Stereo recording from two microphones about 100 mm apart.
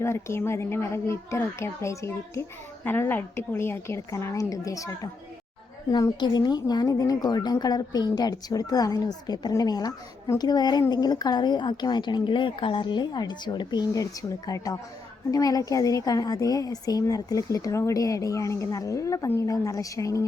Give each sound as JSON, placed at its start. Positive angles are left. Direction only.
{"t": 0.0, "sound": "speech", "side_deg": 25}
{"t": 5.9, "sound": "a woman's voice", "side_deg": 45}